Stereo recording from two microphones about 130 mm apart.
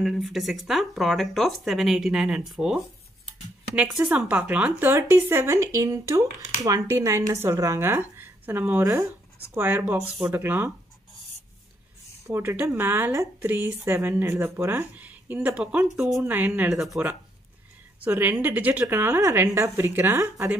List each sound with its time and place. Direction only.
0.0 s a woman's voice: centre (ahead or behind)
12.3 s a woman's voice: 20° right (ahead or behind)
16.7 s speech: centre (ahead or behind)
18.0 s a woman's voice: 15° right (ahead or behind)